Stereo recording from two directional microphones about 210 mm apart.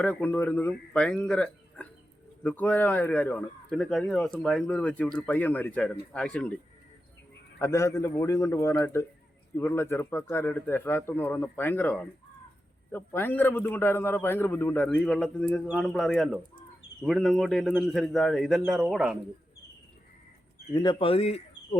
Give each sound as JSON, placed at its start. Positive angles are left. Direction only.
{"t": 0.0, "sound": "a man's voice", "side_deg": 5}
{"t": 7.6, "sound": "a man's voice", "side_deg": 15}
{"t": 20.7, "sound": "speech", "side_deg": 25}